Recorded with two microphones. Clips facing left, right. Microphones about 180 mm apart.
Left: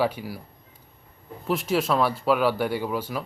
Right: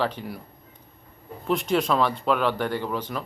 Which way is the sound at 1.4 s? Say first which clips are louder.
Right 1 dB; 5° left (ahead or behind).